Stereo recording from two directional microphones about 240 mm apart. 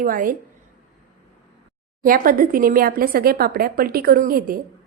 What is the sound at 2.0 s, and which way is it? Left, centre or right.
A woman's voice, right.